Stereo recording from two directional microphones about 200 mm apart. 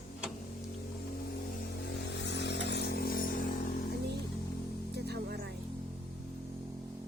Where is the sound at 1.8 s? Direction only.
55° left (ahead or behind).